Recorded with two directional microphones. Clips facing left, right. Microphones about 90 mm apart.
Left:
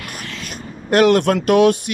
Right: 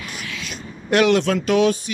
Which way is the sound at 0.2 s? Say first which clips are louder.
Left 1 dB; 45° left (ahead or behind).